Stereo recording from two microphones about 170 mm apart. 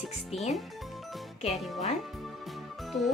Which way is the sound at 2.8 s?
Centre (ahead or behind).